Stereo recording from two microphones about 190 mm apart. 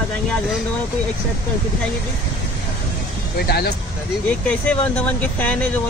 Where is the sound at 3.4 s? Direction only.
55° left (ahead or behind).